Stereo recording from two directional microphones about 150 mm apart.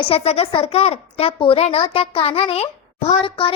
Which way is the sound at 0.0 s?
40° left (ahead or behind).